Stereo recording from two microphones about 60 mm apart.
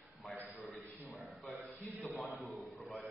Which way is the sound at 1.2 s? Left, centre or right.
Centre.